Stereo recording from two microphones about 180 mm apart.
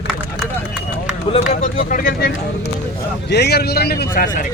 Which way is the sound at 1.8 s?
50° left (ahead or behind).